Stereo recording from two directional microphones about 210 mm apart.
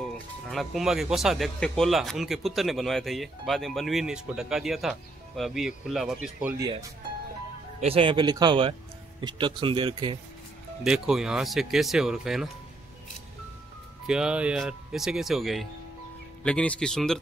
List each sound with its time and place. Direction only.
0.0 s speech: centre (ahead or behind)
7.8 s speech: 25° right (ahead or behind)
10.8 s speech: centre (ahead or behind)
14.0 s speech: 5° right (ahead or behind)